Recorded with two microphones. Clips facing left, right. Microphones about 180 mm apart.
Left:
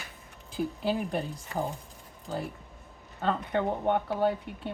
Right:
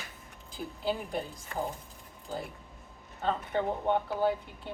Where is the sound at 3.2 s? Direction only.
65° left (ahead or behind).